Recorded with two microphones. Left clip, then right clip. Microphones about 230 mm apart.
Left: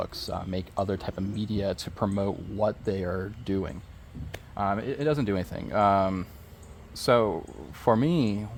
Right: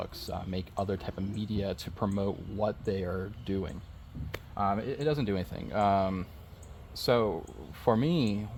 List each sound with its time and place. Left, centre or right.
0.0 s speech: left